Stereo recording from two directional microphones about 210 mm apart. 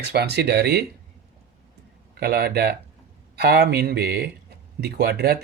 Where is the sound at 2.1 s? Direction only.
50° right (ahead or behind).